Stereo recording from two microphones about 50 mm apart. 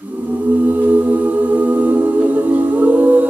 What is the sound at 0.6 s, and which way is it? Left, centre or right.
Music, right.